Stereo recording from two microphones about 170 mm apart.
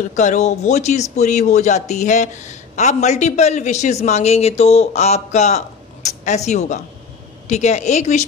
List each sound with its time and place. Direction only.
0.1 s speech: 45° left (ahead or behind)